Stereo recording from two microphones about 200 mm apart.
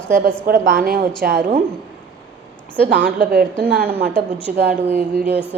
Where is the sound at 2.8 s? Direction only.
60° right (ahead or behind).